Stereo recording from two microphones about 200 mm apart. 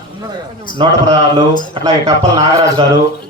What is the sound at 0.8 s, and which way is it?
Speech, 25° right (ahead or behind).